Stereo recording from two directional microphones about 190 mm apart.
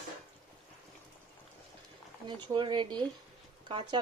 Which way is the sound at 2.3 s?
25° right (ahead or behind).